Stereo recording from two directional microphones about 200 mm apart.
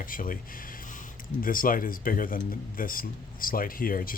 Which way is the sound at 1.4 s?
45° left (ahead or behind).